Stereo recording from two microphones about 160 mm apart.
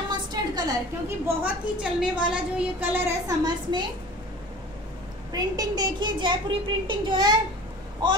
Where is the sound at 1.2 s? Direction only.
10° right (ahead or behind).